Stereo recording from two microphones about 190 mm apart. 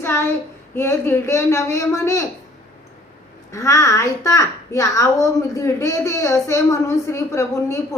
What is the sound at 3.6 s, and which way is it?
A woman's voice, 15° left (ahead or behind).